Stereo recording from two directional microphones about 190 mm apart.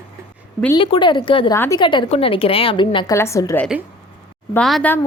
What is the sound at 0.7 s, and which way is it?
A woman's voice, 25° left (ahead or behind).